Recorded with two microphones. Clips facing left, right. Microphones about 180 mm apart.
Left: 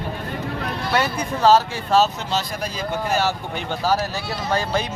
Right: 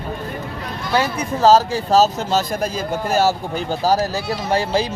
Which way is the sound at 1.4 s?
40° right (ahead or behind).